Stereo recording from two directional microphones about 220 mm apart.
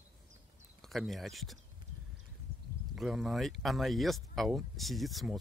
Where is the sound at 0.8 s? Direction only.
Centre (ahead or behind).